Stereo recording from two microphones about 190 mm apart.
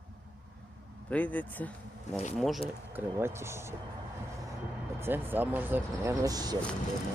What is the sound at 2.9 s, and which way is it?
Speech, 15° right (ahead or behind).